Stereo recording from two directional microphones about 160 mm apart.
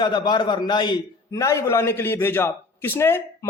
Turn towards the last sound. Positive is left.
turn(degrees=15)  # may be behind; listen again after turning